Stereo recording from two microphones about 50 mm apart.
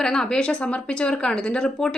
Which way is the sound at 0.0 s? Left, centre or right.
Centre.